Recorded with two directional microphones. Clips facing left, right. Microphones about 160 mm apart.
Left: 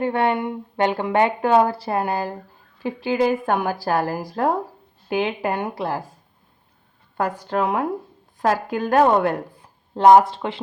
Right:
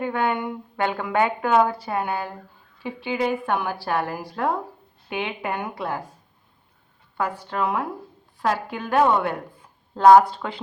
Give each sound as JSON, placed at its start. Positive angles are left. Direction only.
{"t": 0.0, "sound": "a woman's voice", "side_deg": 30}
{"t": 7.2, "sound": "a woman's voice", "side_deg": 45}
{"t": 9.9, "sound": "speech", "side_deg": 25}